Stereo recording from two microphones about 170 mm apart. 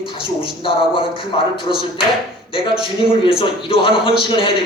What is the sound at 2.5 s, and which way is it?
A man's voice, 30° left (ahead or behind).